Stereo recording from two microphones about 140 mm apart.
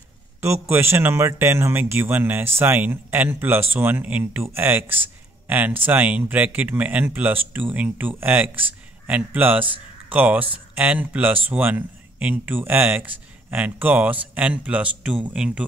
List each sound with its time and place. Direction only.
0.4 s speech: 15° right (ahead or behind)